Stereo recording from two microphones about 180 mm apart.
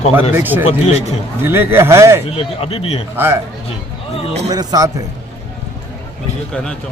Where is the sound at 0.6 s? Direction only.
40° left (ahead or behind).